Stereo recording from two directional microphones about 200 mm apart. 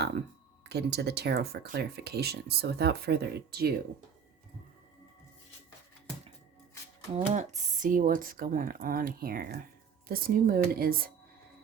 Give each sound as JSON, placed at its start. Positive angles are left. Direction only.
{"t": 0.7, "sound": "speech", "side_deg": -55}
{"t": 7.2, "sound": "speech", "side_deg": -35}